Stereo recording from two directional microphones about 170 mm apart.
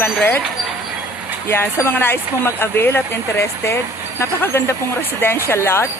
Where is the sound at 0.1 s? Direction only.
10° left (ahead or behind).